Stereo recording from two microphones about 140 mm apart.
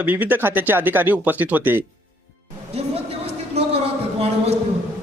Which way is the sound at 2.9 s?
50° right (ahead or behind).